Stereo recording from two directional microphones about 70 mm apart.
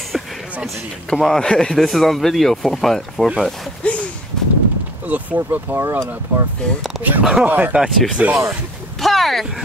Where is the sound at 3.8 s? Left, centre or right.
Centre.